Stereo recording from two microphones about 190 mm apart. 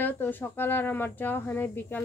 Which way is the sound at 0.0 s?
10° left (ahead or behind).